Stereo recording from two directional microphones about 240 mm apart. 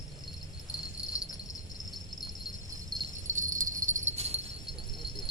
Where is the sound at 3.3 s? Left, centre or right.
Right.